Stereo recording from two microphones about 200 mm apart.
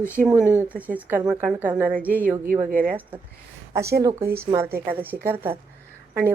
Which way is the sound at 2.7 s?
45° right (ahead or behind).